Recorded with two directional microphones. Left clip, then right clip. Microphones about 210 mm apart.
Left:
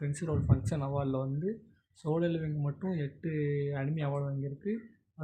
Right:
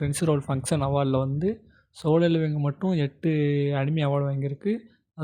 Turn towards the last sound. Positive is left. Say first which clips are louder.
# right 9 dB
turn(degrees=-45)  # may be behind; listen again after turning